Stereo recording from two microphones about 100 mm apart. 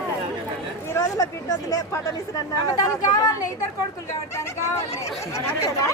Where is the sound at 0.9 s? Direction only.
30° left (ahead or behind).